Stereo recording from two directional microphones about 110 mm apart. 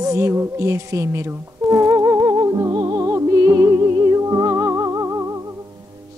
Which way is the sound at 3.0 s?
30° right (ahead or behind).